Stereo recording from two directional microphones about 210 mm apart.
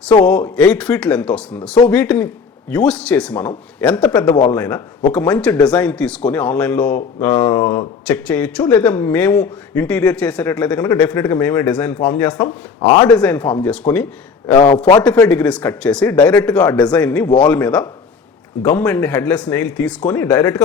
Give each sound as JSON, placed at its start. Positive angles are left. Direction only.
{"t": 0.1, "sound": "speech", "side_deg": 5}
{"t": 4.3, "sound": "a man's voice", "side_deg": 20}
{"t": 4.5, "sound": "speech", "side_deg": 5}
{"t": 12.8, "sound": "a man's voice", "side_deg": 20}
{"t": 13.1, "sound": "speech", "side_deg": 5}